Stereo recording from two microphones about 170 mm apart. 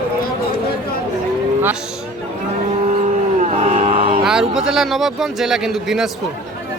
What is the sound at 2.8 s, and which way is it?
Cattle, 45° right (ahead or behind).